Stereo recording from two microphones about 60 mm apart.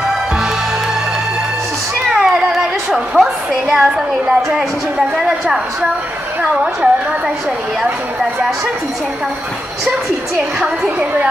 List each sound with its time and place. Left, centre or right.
2.2 s a woman's voice: centre